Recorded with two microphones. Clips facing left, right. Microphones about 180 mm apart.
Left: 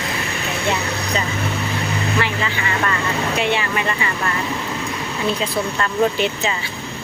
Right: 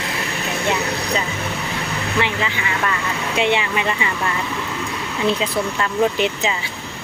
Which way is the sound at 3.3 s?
20° right (ahead or behind).